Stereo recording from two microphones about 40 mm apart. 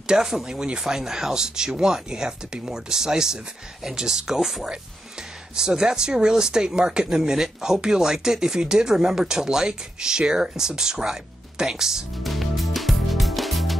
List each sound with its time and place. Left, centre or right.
0.0 s speech: centre
4.4 s speech: centre
12.2 s music: centre